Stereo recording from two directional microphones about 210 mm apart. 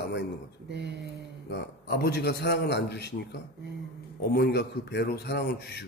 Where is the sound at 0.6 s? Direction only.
55° right (ahead or behind).